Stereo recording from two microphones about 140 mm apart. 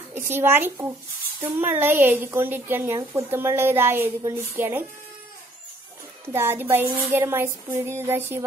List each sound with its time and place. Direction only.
0.1 s a woman's voice: 15° right (ahead or behind)
6.3 s a woman's voice: 15° right (ahead or behind)